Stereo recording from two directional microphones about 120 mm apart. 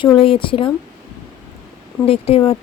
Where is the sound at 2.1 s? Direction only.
55° left (ahead or behind).